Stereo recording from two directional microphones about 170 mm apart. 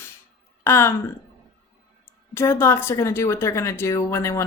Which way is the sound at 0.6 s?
15° left (ahead or behind).